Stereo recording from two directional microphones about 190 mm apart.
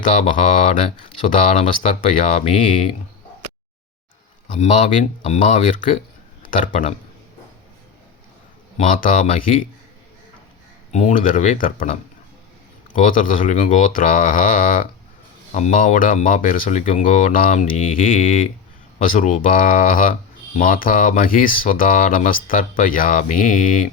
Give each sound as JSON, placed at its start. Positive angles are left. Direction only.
{"t": 0.3, "sound": "speech", "side_deg": 35}
{"t": 4.5, "sound": "speech", "side_deg": 40}
{"t": 6.7, "sound": "speech", "side_deg": 30}
{"t": 8.8, "sound": "speech", "side_deg": 45}
{"t": 10.9, "sound": "speech", "side_deg": 40}